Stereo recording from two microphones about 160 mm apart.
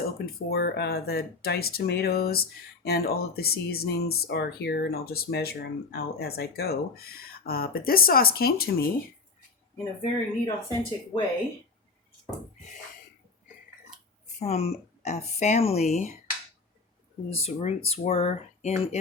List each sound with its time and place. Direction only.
0.0 s speech: 75° left (ahead or behind)
10.4 s speech: 25° left (ahead or behind)
14.3 s speech: 40° left (ahead or behind)
17.2 s speech: 40° left (ahead or behind)